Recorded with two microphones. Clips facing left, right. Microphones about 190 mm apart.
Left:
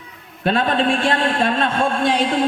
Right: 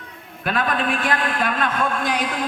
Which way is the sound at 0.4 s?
25° left (ahead or behind).